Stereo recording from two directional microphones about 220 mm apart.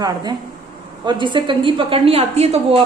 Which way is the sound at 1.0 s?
20° right (ahead or behind).